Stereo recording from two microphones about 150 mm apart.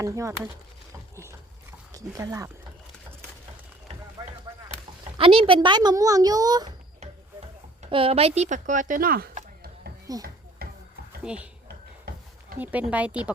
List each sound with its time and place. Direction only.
0.0 s speech: 20° right (ahead or behind)
1.1 s a sound: 20° right (ahead or behind)
1.9 s speech: 20° right (ahead or behind)
4.2 s chop: 25° right (ahead or behind)
5.1 s speech: 35° right (ahead or behind)
7.9 s speech: 35° right (ahead or behind); by 9.3 s 80° right
10.1 s speech: 25° right (ahead or behind)
10.6 s stir: 90° right
11.2 s speech: 5° right (ahead or behind)
11.7 s a sound: 90° right
12.5 s speech: 10° right (ahead or behind)